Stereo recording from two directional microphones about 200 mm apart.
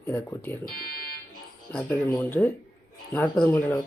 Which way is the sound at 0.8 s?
50° left (ahead or behind).